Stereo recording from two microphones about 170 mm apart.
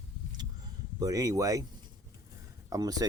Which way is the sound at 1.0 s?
20° right (ahead or behind).